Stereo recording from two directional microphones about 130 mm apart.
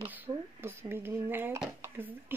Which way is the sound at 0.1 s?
15° right (ahead or behind).